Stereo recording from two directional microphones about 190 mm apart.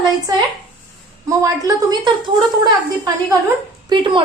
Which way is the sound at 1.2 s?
15° right (ahead or behind).